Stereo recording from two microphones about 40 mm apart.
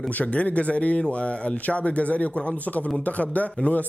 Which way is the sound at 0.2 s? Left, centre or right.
Left.